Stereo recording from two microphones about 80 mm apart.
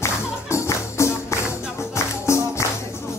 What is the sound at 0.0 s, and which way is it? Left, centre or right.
Music, left.